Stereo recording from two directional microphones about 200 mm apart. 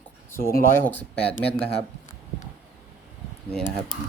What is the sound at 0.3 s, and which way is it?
Speech, 45° left (ahead or behind).